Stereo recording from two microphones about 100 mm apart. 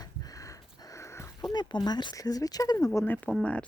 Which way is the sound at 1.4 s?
50° left (ahead or behind).